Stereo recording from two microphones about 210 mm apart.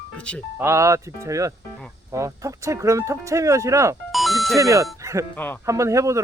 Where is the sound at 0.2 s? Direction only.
5° left (ahead or behind).